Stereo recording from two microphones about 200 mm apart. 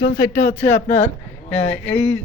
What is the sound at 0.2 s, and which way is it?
Speech, 15° left (ahead or behind).